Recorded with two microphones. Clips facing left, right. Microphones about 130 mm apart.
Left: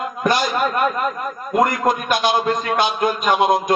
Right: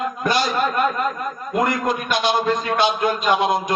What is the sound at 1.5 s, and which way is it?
A man's voice, 50° left (ahead or behind).